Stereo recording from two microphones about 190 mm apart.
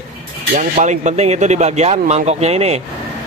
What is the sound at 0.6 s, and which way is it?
Speech, 40° right (ahead or behind).